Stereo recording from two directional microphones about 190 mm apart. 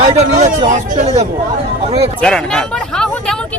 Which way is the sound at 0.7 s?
40° right (ahead or behind).